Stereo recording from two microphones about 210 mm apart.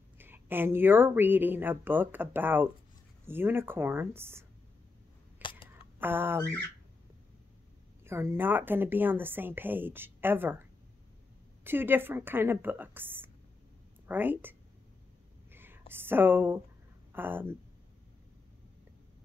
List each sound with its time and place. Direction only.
0.2 s speech: 10° right (ahead or behind)
5.4 s a sound: 25° left (ahead or behind)
5.9 s speech: 10° right (ahead or behind)
8.0 s speech: 10° right (ahead or behind)
15.5 s whispering: 10° right (ahead or behind)
15.9 s speech: 10° right (ahead or behind)